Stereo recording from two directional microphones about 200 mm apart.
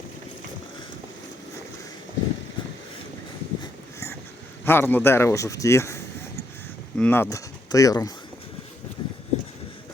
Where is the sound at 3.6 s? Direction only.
15° left (ahead or behind).